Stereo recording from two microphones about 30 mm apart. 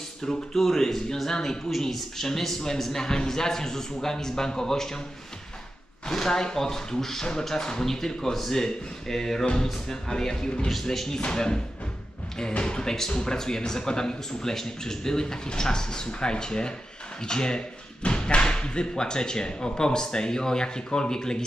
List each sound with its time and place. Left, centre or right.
0.2 s speech: left
0.6 s a man's voice: centre
6.1 s a man's voice: centre
10.9 s speech: centre